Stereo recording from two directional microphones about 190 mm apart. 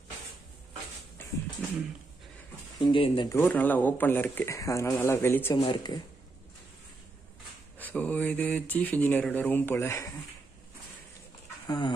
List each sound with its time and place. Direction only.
2.8 s speech: 25° left (ahead or behind)
3.3 s speech: 10° left (ahead or behind)
5.6 s speech: 25° left (ahead or behind)
7.8 s speech: 10° left (ahead or behind)
11.6 s speech: 20° left (ahead or behind)